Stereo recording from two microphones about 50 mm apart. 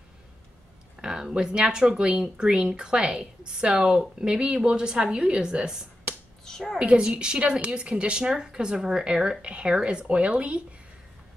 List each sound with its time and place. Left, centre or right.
1.0 s speech: centre
6.4 s a woman's voice: centre
6.8 s a woman's voice: centre